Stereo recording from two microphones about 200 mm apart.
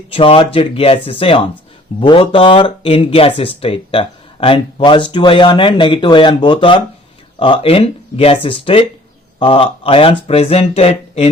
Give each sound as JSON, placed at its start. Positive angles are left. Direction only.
{"t": 0.1, "sound": "speech", "side_deg": 25}